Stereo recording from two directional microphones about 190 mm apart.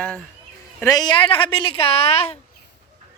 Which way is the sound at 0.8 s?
20° left (ahead or behind).